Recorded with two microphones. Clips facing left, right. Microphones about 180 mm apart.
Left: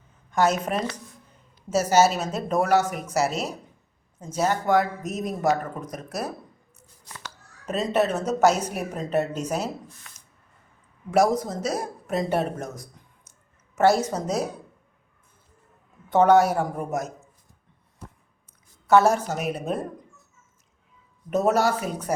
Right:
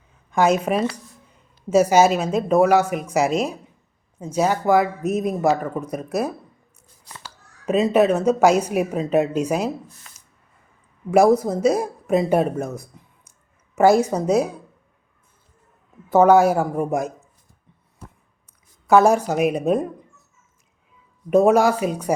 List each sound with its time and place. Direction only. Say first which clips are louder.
0.3 s speech: right 4 dB; 10° right (ahead or behind)
7.1 s a sound: even; 30° right (ahead or behind)
7.7 s speech: right 7 dB; 10° right (ahead or behind)
10.0 s a sound: right 1 dB; 30° right (ahead or behind)
11.1 s speech: right 6 dB; 10° right (ahead or behind)
14.0 s speech: right 7 dB; 10° right (ahead or behind)
16.0 s speech: right 4 dB; 5° right (ahead or behind)
18.9 s speech: right 4 dB; 10° right (ahead or behind)
21.2 s speech: right 6 dB; 10° right (ahead or behind)